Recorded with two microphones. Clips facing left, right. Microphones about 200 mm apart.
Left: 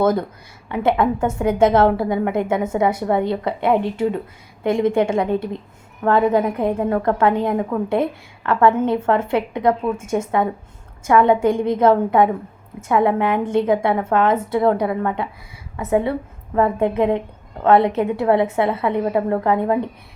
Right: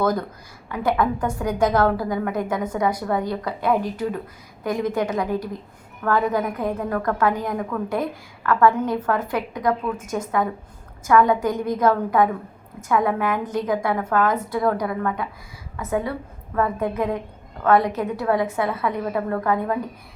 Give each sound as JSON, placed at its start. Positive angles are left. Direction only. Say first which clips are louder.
{"t": 0.0, "sound": "a woman's voice", "louder": "left 4 dB", "side_deg": 25}